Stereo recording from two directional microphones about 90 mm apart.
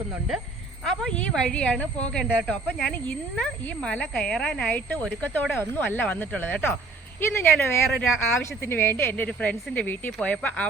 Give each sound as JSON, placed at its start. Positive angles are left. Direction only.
{"t": 1.3, "sound": "speech", "side_deg": 10}
{"t": 7.9, "sound": "speech", "side_deg": 5}
{"t": 8.6, "sound": "speech", "side_deg": 25}